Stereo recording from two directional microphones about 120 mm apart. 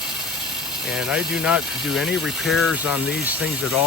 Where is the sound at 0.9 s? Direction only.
5° right (ahead or behind).